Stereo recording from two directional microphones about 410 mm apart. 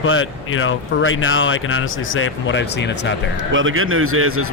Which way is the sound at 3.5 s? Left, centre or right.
Right.